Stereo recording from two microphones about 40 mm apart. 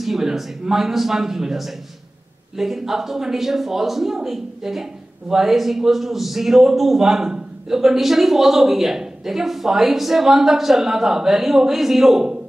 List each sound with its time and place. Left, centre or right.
0.0 s a woman's voice: centre